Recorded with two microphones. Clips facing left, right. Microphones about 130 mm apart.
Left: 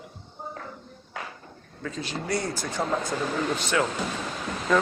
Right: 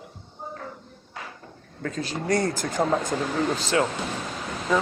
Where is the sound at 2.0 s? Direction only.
45° right (ahead or behind).